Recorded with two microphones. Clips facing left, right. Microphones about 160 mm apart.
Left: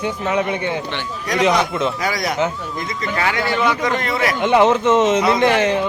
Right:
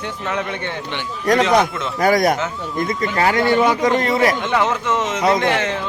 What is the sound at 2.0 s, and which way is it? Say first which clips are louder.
A man's voice: right 4 dB; 50° right (ahead or behind).